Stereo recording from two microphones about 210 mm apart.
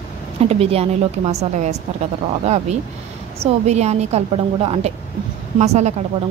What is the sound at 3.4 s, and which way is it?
A woman's voice, 30° right (ahead or behind).